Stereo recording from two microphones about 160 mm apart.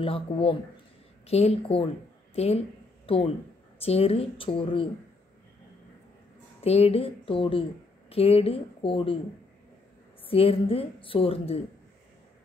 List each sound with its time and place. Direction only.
0.0 s a woman's voice: 35° left (ahead or behind)
6.6 s a woman's voice: 40° left (ahead or behind)
10.2 s a woman's voice: 35° left (ahead or behind)